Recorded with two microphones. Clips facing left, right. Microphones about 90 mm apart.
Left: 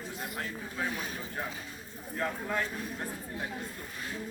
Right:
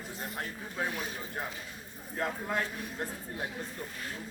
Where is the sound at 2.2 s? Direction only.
25° right (ahead or behind).